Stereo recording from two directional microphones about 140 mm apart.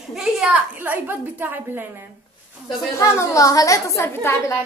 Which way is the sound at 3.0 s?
20° left (ahead or behind).